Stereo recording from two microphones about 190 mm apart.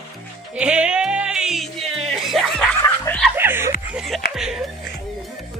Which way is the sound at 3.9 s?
Centre (ahead or behind).